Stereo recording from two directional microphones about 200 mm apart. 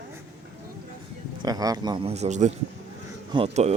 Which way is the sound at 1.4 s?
20° right (ahead or behind).